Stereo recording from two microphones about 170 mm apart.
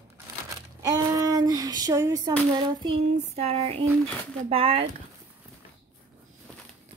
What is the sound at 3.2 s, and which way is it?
Speech, 35° right (ahead or behind).